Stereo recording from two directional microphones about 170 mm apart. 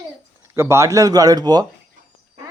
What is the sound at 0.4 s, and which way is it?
Speech, 15° right (ahead or behind).